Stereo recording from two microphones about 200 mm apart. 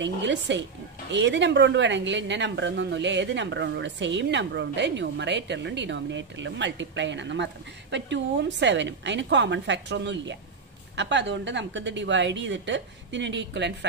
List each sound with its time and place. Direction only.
0.0 s a woman's voice: 60° right (ahead or behind)